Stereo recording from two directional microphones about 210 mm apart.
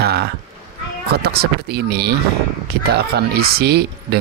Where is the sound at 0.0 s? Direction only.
50° right (ahead or behind).